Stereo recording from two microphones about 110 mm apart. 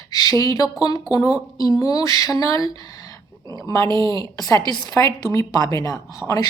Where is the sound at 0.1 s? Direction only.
35° left (ahead or behind).